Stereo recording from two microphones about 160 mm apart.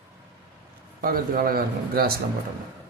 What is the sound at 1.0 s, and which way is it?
A man's voice, 65° right (ahead or behind).